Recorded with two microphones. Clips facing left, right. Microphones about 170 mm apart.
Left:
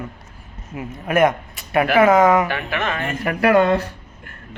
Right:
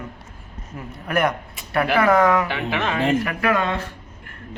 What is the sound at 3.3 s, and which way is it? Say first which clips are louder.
Speech: left 6 dB; 35° left (ahead or behind).